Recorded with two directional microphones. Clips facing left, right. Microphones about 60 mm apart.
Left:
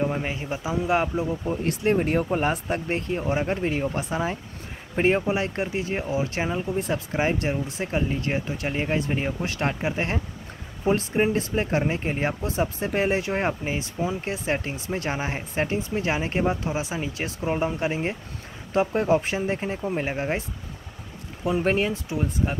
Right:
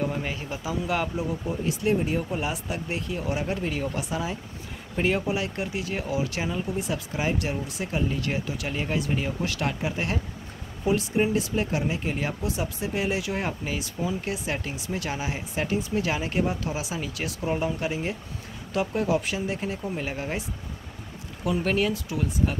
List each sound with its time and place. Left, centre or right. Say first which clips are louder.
0.0 s speech: left 3 dB; left
1.9 s speech: left 4 dB; left
21.5 s speech: left 2 dB; left